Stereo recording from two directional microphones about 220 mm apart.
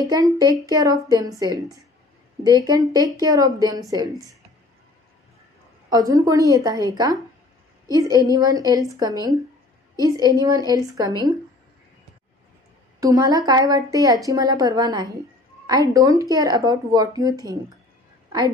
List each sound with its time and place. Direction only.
0.0 s a woman's voice: 15° right (ahead or behind)
5.9 s a woman's voice: 15° right (ahead or behind)
7.9 s a woman's voice: 15° right (ahead or behind)
13.0 s a woman's voice: 15° right (ahead or behind)